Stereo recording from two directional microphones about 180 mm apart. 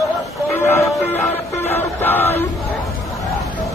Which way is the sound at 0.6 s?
15° left (ahead or behind).